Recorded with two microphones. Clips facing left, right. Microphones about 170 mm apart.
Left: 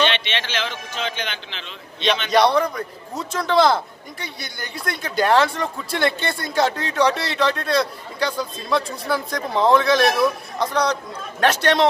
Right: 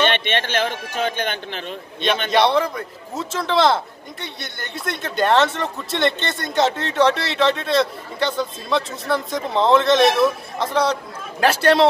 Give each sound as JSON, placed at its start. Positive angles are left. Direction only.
{"t": 0.0, "sound": "speech", "side_deg": -50}
{"t": 2.3, "sound": "speech", "side_deg": 0}